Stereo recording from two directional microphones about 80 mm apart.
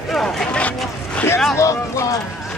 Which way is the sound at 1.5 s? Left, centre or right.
Left.